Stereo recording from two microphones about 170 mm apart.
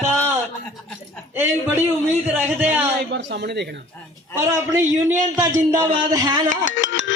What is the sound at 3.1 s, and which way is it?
Speech, 90° right.